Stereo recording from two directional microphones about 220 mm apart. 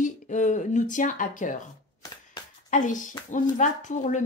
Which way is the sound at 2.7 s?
35° left (ahead or behind).